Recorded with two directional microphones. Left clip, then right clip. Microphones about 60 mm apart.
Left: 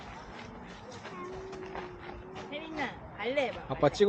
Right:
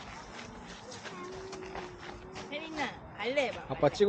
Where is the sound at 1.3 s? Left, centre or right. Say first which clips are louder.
Left 1 dB; right.